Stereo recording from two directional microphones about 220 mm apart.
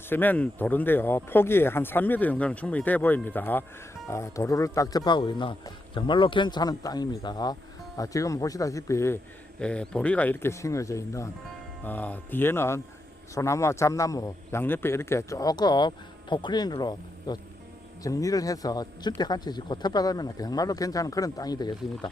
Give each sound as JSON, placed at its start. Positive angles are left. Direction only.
{"t": 0.1, "sound": "speech", "side_deg": 10}